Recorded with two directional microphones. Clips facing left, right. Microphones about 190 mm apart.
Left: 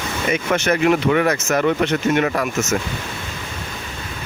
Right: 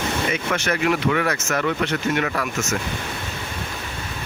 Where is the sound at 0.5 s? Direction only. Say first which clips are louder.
Left 6 dB; 20° left (ahead or behind).